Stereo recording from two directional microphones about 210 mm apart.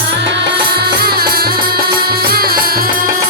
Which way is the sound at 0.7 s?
50° right (ahead or behind).